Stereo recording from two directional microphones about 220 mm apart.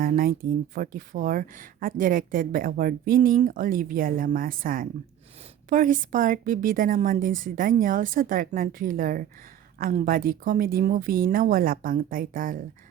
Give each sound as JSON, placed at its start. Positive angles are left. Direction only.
{"t": 0.0, "sound": "speech", "side_deg": -40}